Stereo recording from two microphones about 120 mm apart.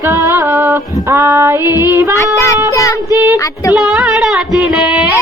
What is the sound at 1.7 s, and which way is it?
Music, 20° right (ahead or behind).